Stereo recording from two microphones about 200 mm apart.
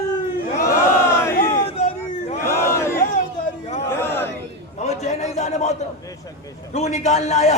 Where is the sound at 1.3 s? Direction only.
45° left (ahead or behind).